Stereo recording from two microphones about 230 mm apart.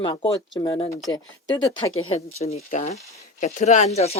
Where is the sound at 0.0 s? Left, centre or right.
Centre.